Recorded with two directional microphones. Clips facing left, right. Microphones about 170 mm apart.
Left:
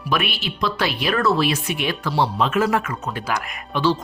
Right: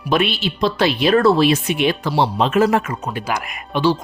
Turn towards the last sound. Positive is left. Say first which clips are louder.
# right 3 dB
turn(degrees=-15)  # may be behind; listen again after turning